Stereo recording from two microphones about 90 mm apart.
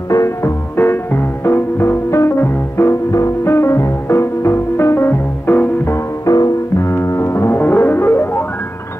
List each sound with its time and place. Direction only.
0.1 s music: 35° left (ahead or behind)
0.7 s music: 25° left (ahead or behind)
6.2 s music: 40° left (ahead or behind)
6.9 s music: 30° left (ahead or behind)